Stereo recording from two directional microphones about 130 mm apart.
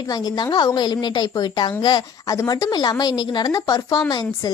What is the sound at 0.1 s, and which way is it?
A woman's voice, 30° left (ahead or behind).